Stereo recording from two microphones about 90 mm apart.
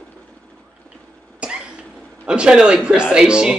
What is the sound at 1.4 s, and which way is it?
Cough, 10° right (ahead or behind).